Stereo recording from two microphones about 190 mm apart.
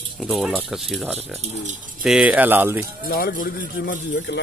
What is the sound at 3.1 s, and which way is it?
Speech, 50° left (ahead or behind).